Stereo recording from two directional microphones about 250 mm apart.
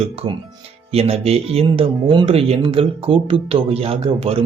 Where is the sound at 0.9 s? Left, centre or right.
Right.